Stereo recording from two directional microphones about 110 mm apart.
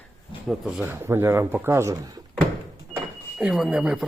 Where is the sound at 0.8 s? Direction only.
20° right (ahead or behind).